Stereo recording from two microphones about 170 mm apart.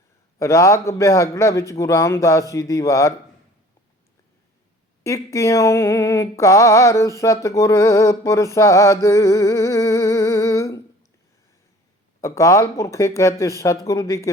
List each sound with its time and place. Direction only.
0.3 s mantra: 15° left (ahead or behind)
5.0 s mantra: 20° left (ahead or behind)
12.2 s mantra: 20° left (ahead or behind)